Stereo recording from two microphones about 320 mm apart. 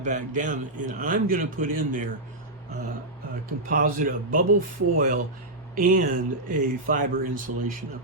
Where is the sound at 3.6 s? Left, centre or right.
Right.